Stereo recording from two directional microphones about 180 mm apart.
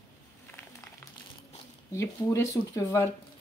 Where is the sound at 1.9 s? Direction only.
15° left (ahead or behind).